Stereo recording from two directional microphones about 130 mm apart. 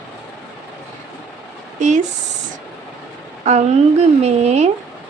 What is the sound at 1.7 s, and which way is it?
Speech, 70° right (ahead or behind).